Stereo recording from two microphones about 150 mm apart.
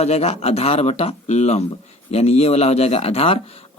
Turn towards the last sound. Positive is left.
turn(degrees=40)  # may be behind; listen again after turning